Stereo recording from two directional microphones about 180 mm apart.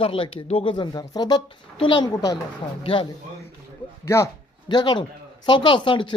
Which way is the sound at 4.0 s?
15° left (ahead or behind).